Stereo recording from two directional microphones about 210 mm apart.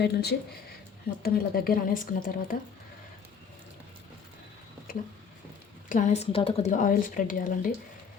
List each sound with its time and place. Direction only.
0.0 s speech: 50° left (ahead or behind)
5.9 s a woman's voice: 35° left (ahead or behind)